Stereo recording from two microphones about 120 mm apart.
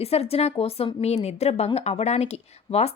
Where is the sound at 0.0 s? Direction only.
55° left (ahead or behind).